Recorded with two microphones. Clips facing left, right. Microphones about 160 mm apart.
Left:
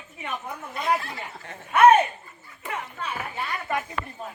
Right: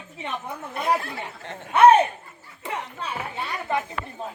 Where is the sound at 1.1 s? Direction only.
30° right (ahead or behind).